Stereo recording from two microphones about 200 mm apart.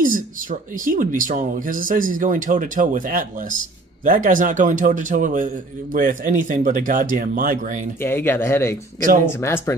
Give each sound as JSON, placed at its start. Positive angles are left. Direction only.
{"t": 0.0, "sound": "a man's voice", "side_deg": -45}
{"t": 8.0, "sound": "speech", "side_deg": 10}